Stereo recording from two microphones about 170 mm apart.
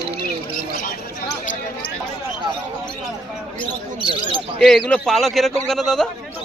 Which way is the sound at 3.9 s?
30° right (ahead or behind).